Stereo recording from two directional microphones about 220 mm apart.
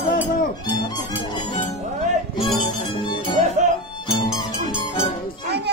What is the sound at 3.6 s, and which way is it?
Music, 35° right (ahead or behind).